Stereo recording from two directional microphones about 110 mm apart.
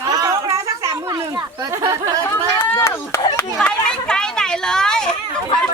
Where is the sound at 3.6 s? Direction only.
10° left (ahead or behind).